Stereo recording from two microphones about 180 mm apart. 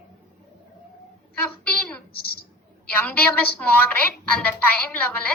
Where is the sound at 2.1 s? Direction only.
60° left (ahead or behind).